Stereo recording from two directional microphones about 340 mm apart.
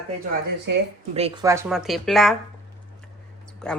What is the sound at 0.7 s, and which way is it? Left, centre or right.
Speech, right.